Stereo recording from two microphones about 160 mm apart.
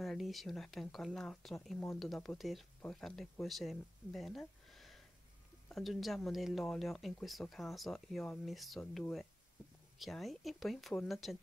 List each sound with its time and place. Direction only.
0.0 s speech: centre (ahead or behind)